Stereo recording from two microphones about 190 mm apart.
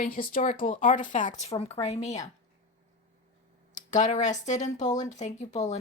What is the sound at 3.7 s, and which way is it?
Speech, 40° left (ahead or behind).